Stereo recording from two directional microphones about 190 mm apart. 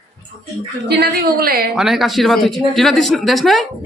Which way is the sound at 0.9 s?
55° right (ahead or behind).